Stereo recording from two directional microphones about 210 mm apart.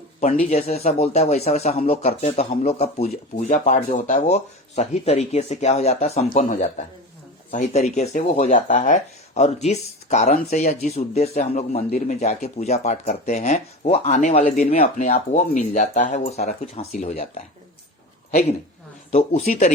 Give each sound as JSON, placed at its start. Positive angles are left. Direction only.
{"t": 0.5, "sound": "speech", "side_deg": 30}
{"t": 19.1, "sound": "speech", "side_deg": 30}